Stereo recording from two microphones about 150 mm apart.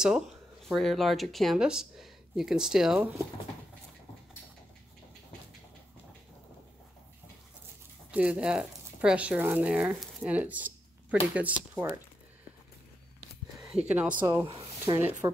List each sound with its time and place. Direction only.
0.7 s speech: centre (ahead or behind)
8.1 s speech: 10° right (ahead or behind)
13.8 s speech: 10° right (ahead or behind)
14.2 s speech: 25° right (ahead or behind)
14.5 s a sound: 35° right (ahead or behind)